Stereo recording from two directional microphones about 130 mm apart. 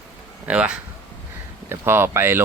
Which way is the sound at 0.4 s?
10° right (ahead or behind).